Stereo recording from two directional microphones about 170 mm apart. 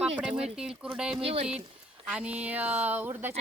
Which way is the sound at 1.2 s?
35° right (ahead or behind).